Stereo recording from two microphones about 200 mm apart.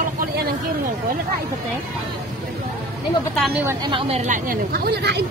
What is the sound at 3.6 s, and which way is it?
A woman's voice, 25° right (ahead or behind).